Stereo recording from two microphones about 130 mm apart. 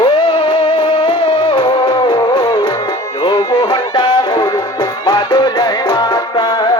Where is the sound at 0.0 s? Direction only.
45° left (ahead or behind).